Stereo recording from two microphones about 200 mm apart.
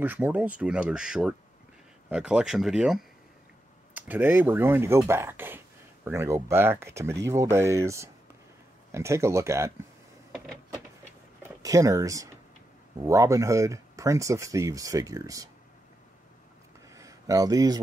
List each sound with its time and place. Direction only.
0.0 s speech: 10° right (ahead or behind)
10.3 s power windows: 5° left (ahead or behind)
11.6 s speech: 15° right (ahead or behind)
16.9 s a sound: 15° right (ahead or behind)